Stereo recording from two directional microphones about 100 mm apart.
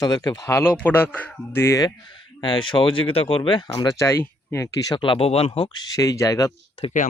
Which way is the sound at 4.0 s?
25° left (ahead or behind).